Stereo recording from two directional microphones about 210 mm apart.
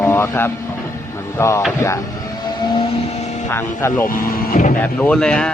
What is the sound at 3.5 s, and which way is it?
Speech, 10° left (ahead or behind).